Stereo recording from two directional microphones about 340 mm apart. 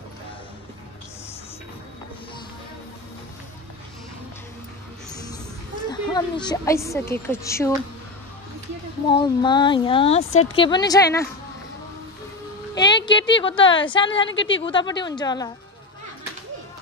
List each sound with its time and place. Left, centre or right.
5.9 s a woman's voice: centre
9.1 s speech: centre
12.7 s a woman's voice: centre
14.2 s a woman's voice: left
14.6 s speech: centre